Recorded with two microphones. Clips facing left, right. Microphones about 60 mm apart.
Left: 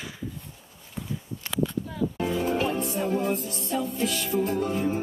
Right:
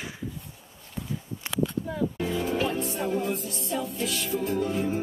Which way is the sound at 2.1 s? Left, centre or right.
Left.